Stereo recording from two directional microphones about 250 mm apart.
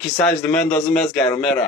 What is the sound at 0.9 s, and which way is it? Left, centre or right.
Speech, centre.